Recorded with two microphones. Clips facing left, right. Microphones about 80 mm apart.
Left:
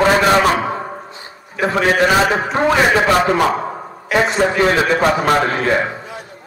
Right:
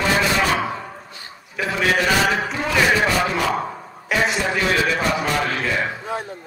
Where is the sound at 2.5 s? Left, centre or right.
Left.